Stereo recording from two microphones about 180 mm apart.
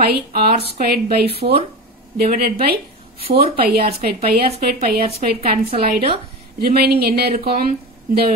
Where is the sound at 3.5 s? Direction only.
55° right (ahead or behind).